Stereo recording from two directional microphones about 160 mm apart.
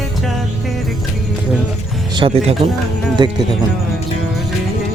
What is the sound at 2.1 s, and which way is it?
Speech, 35° right (ahead or behind).